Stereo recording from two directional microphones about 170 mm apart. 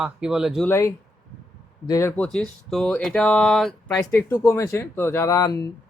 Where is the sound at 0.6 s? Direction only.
15° left (ahead or behind).